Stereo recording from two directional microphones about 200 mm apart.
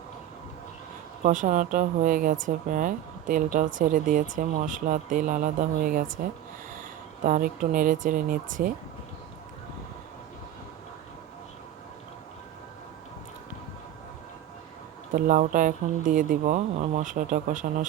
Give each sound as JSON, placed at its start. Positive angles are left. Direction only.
{"t": 1.2, "sound": "speech", "side_deg": -40}
{"t": 7.3, "sound": "speech", "side_deg": -40}
{"t": 15.1, "sound": "speech", "side_deg": -40}